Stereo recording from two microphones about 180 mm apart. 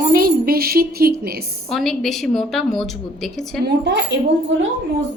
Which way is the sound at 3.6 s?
70° right (ahead or behind).